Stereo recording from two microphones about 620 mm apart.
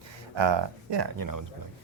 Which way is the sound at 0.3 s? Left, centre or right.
Right.